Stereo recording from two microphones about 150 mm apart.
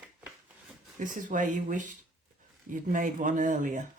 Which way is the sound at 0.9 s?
60° right (ahead or behind).